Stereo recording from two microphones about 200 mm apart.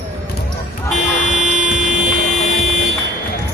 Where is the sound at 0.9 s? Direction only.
35° left (ahead or behind).